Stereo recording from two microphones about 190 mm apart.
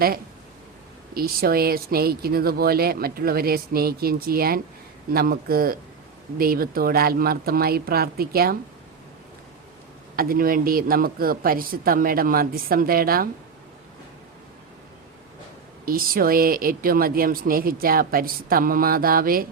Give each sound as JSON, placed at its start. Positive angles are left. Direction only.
{"t": 1.1, "sound": "a woman's voice", "side_deg": -50}
{"t": 10.2, "sound": "a woman's voice", "side_deg": -50}
{"t": 15.9, "sound": "a woman's voice", "side_deg": -50}